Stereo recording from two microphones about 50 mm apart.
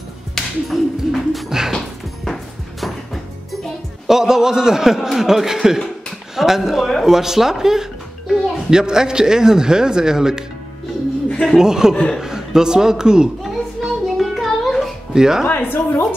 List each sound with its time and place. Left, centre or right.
0.3 s music: centre
4.1 s speech: centre
11.5 s speech: centre
13.4 s a sound: centre
15.1 s speech: centre
15.4 s a woman's voice: left